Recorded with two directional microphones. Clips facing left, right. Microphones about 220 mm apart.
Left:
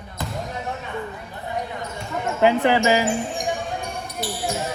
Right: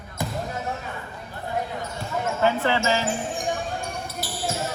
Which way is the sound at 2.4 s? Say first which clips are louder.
Left 6 dB; 15° left (ahead or behind).